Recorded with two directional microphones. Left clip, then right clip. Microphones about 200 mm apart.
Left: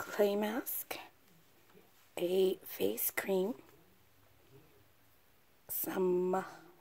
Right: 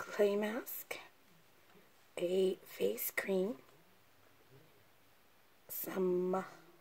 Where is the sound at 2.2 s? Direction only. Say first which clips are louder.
Left 2 dB; 40° left (ahead or behind).